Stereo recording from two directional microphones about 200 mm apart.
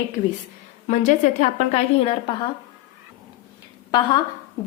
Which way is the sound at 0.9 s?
35° left (ahead or behind).